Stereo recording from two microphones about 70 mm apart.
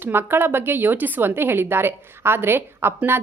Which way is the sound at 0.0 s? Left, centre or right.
Right.